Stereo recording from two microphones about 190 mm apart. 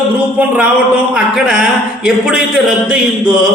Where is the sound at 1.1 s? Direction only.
5° right (ahead or behind).